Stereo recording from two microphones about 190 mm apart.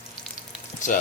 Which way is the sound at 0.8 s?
40° left (ahead or behind).